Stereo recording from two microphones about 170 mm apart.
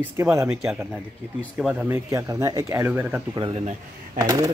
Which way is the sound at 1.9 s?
15° right (ahead or behind).